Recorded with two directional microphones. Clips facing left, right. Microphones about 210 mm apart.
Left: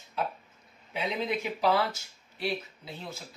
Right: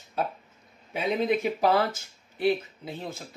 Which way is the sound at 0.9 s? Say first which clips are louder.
Right 6 dB; 45° right (ahead or behind).